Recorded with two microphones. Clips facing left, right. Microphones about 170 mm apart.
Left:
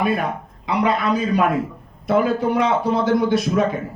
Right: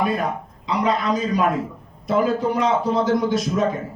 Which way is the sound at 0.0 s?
65° left (ahead or behind).